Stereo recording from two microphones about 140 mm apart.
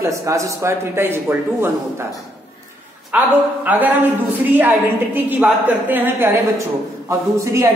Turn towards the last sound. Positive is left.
turn(degrees=-20)  # may be behind; listen again after turning